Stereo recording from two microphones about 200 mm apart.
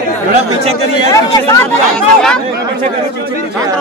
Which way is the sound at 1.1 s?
20° left (ahead or behind).